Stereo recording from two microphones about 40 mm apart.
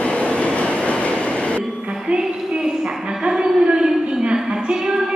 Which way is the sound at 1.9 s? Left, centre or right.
Centre.